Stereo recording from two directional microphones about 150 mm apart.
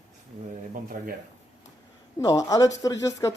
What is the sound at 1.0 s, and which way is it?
Speech, 65° right (ahead or behind).